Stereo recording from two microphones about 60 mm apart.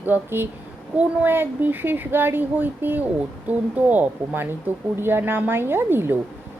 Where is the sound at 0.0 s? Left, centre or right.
Right.